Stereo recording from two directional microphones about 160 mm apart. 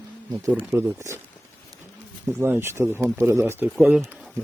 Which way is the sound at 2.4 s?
15° right (ahead or behind).